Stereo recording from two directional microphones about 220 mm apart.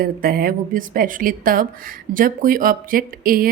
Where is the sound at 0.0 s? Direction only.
40° right (ahead or behind).